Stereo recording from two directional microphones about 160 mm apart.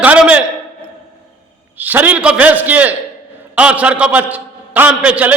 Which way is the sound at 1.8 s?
10° right (ahead or behind).